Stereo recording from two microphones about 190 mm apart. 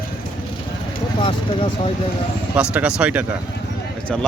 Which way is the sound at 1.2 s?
25° left (ahead or behind).